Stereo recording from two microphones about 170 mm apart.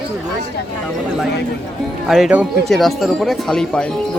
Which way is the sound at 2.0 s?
Centre (ahead or behind).